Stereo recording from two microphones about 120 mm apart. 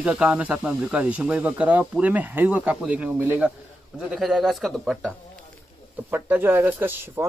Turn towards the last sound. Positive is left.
turn(degrees=-20)  # may be behind; listen again after turning